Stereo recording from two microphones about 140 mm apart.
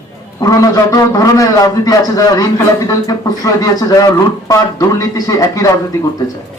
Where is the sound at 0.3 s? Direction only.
25° left (ahead or behind).